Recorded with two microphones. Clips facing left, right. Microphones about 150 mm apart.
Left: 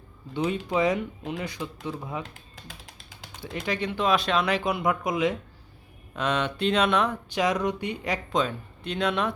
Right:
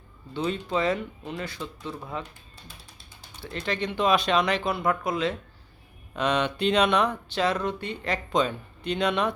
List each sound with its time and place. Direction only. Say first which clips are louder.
0.3 s speech: left 2 dB; 15° left (ahead or behind)
2.6 s a sound: left 4 dB; 90° left
3.4 s speech: even; 10° left (ahead or behind)
6.1 s speech: right 2 dB; centre (ahead or behind)
7.3 s speech: left 1 dB; 15° left (ahead or behind)